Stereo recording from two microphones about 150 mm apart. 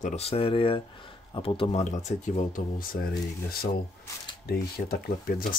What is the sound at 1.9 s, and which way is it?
Speech, 60° left (ahead or behind).